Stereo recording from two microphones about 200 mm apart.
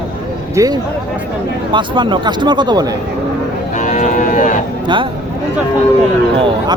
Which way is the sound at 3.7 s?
40° left (ahead or behind).